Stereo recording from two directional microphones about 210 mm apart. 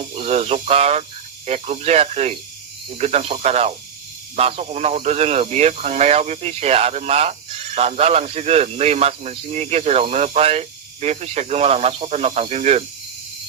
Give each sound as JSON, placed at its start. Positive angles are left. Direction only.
{"t": 0.0, "sound": "speech", "side_deg": -30}